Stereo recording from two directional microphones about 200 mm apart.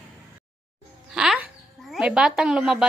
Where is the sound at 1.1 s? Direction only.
5° right (ahead or behind).